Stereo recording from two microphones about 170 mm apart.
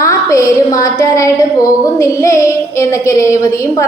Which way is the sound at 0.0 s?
20° left (ahead or behind).